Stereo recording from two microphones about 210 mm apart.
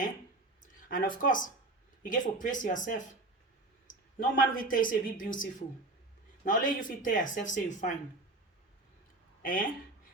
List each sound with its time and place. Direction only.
0.6 s speech: 40° left (ahead or behind)
9.4 s speech: 40° left (ahead or behind)